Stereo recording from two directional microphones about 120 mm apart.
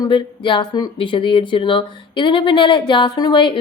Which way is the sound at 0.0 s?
45° left (ahead or behind).